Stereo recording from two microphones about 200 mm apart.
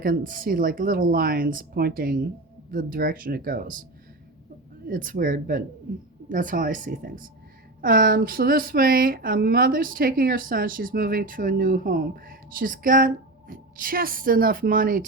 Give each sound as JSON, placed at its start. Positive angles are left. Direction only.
{"t": 0.0, "sound": "speech", "side_deg": -45}
{"t": 4.9, "sound": "speech", "side_deg": -45}